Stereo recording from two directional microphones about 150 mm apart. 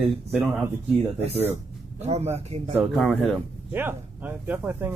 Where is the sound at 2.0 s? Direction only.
45° right (ahead or behind).